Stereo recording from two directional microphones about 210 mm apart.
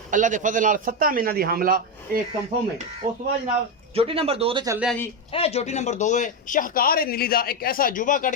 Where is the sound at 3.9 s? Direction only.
25° right (ahead or behind).